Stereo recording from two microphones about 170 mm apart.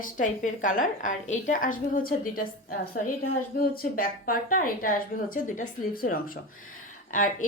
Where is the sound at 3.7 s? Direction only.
60° left (ahead or behind).